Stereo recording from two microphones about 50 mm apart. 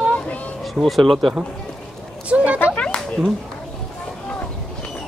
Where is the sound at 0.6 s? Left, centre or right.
Centre.